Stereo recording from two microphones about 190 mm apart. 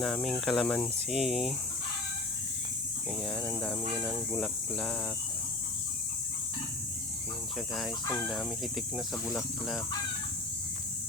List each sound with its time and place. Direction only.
0.0 s speech: centre (ahead or behind)
3.2 s speech: 10° left (ahead or behind)
7.7 s speech: centre (ahead or behind)